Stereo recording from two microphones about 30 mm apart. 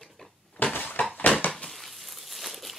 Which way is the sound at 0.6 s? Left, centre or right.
Left.